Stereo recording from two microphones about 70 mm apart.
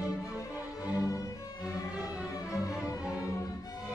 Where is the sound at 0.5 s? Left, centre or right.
Left.